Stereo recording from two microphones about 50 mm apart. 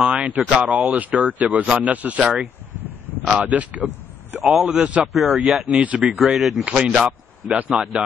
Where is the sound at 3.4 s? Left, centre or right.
Right.